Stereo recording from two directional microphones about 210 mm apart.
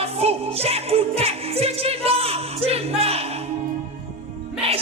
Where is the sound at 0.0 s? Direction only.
30° right (ahead or behind).